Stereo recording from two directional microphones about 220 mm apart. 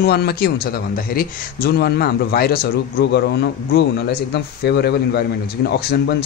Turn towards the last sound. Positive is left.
turn(degrees=45)  # may be behind; listen again after turning